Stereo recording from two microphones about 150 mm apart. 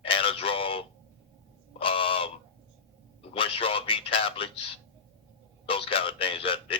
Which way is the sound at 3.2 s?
35° left (ahead or behind).